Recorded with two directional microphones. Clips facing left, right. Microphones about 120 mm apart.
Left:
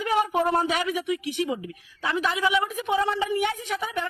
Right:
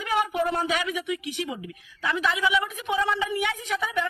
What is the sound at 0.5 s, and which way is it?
Speech, 30° left (ahead or behind).